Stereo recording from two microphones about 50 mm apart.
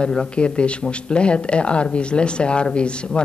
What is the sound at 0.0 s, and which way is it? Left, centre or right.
Speech, centre.